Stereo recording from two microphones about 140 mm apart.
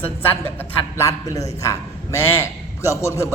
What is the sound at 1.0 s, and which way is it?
A man's voice, 25° left (ahead or behind).